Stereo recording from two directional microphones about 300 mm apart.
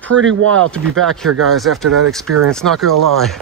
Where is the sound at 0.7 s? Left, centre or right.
Centre.